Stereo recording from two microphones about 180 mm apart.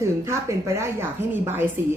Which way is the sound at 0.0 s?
15° right (ahead or behind).